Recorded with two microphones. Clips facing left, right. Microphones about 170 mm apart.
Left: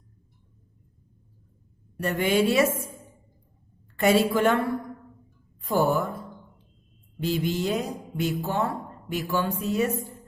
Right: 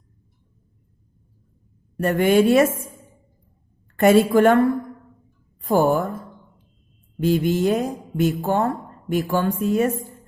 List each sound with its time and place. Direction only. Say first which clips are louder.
2.0 s speech: right 6 dB; 50° right (ahead or behind)
5.6 s a woman's voice: right 5 dB; 50° right (ahead or behind)